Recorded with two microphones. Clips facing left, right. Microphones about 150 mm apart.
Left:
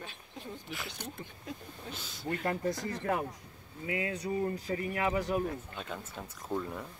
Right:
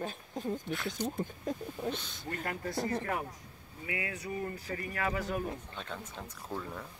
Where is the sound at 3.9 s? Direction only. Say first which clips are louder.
Left 4 dB; 25° left (ahead or behind); by 6.9 s 5° left (ahead or behind).